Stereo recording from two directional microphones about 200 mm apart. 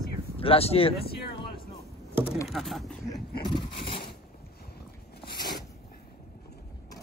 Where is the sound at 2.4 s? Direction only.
Centre (ahead or behind).